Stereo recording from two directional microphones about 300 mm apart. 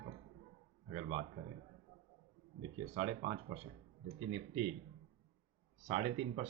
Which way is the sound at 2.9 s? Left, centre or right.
Right.